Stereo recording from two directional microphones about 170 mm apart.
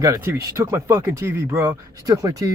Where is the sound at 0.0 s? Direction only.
20° right (ahead or behind).